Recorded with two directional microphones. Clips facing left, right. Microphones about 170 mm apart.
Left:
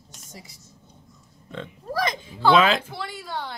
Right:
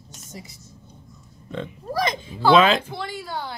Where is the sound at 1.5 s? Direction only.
20° right (ahead or behind).